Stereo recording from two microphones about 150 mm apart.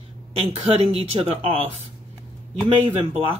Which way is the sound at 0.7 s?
40° right (ahead or behind).